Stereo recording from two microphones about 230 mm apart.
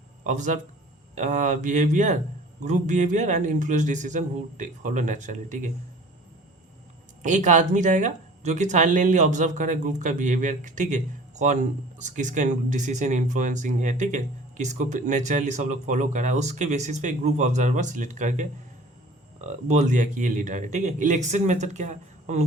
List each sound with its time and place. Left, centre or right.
0.3 s speech: right
7.2 s speech: right